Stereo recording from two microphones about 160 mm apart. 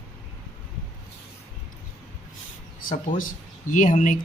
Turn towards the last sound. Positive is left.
turn(degrees=50)  # may be behind; listen again after turning